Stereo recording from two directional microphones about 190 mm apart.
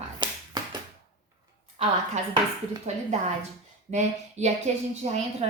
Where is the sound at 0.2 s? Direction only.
20° right (ahead or behind).